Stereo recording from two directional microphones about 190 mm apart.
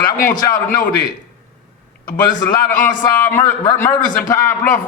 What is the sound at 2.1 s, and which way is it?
A man's voice, 20° left (ahead or behind).